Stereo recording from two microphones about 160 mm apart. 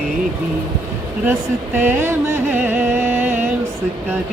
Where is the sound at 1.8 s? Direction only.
15° right (ahead or behind).